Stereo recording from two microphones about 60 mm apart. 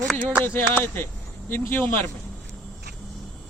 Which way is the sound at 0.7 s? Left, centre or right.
Left.